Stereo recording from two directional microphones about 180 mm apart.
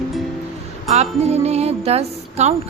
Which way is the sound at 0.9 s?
35° right (ahead or behind).